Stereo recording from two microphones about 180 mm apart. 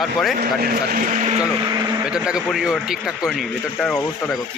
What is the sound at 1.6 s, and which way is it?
Speech, 20° right (ahead or behind).